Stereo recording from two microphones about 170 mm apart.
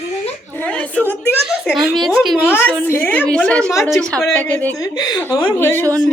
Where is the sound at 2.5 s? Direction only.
10° left (ahead or behind).